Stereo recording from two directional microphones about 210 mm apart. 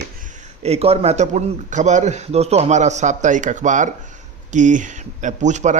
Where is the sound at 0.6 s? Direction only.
30° right (ahead or behind).